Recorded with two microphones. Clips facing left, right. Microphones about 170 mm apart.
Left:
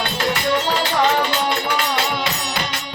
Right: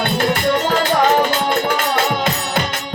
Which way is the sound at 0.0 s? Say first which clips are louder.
Right 4 dB; 50° right (ahead or behind).